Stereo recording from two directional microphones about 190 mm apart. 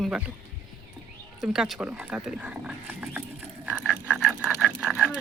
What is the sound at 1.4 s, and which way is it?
Speech, 5° right (ahead or behind).